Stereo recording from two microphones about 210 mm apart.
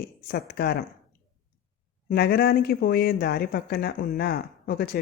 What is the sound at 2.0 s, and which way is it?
Speech, 50° left (ahead or behind).